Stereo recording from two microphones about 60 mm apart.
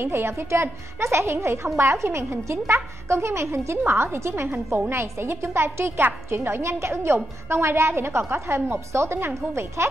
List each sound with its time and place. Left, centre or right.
0.0 s a woman's voice: right